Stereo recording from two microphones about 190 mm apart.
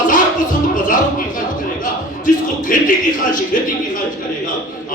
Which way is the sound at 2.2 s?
45° left (ahead or behind).